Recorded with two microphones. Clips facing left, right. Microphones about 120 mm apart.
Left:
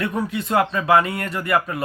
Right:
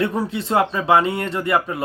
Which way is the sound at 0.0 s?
30° right (ahead or behind).